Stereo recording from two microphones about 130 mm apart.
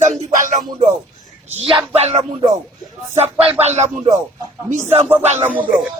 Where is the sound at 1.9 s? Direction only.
55° right (ahead or behind).